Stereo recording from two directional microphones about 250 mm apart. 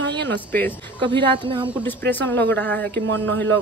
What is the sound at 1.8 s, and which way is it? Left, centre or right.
A woman's voice, centre.